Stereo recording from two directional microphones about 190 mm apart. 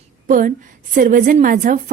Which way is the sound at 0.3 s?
45° right (ahead or behind).